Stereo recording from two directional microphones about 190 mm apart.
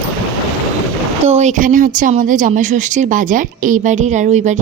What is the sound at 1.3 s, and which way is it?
A woman's voice, 35° right (ahead or behind).